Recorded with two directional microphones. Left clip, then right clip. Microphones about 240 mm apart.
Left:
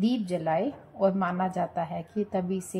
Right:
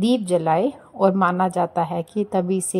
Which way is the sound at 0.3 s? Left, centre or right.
Right.